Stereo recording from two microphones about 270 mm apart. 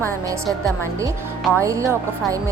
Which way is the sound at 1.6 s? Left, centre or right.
Centre.